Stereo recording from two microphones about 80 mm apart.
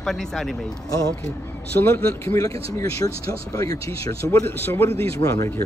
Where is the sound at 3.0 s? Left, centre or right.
Left.